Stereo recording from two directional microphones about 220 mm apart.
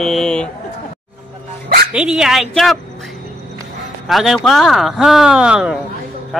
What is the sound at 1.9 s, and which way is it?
A woman's voice, centre (ahead or behind).